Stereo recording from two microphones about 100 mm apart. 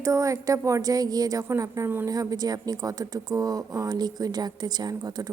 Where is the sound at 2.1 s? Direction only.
40° right (ahead or behind).